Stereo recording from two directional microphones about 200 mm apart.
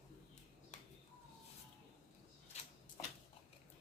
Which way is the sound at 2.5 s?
35° left (ahead or behind).